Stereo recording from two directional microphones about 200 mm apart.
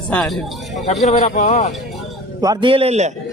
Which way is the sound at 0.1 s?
5° left (ahead or behind).